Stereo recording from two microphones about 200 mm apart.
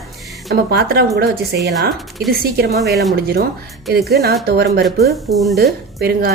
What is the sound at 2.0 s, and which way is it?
Speech, centre (ahead or behind).